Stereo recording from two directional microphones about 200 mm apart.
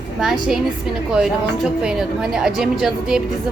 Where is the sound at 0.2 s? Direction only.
Centre (ahead or behind).